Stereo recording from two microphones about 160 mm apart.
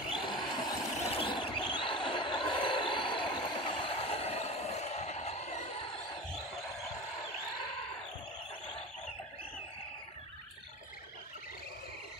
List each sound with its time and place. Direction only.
0.2 s vehicle: 30° left (ahead or behind)